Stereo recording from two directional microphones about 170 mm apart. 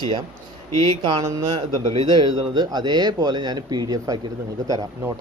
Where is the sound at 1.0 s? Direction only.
20° right (ahead or behind).